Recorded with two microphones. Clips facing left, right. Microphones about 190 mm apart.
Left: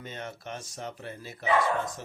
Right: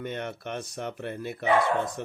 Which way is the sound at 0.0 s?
60° right (ahead or behind).